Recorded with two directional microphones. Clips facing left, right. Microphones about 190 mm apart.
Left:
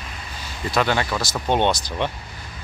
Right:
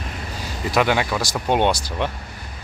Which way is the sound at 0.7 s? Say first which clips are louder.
Right 2 dB; 10° right (ahead or behind).